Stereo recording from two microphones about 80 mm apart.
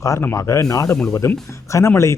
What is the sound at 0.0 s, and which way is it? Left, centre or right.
Speech, left.